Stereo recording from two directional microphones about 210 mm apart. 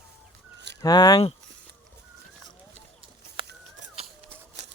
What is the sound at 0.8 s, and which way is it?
Speech, 20° left (ahead or behind).